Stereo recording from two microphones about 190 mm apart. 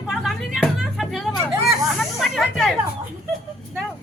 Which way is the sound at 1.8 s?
Centre (ahead or behind).